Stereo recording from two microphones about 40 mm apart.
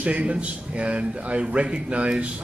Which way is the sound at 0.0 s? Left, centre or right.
Right.